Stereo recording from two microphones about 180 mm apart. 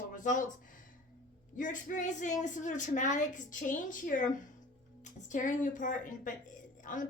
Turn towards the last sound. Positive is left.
turn(degrees=45)  # may be behind; listen again after turning